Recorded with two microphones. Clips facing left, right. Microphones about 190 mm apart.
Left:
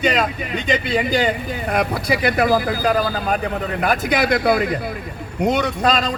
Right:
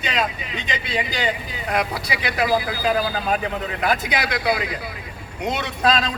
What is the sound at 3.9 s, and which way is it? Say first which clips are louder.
Speech: left 6 dB; 55° left (ahead or behind).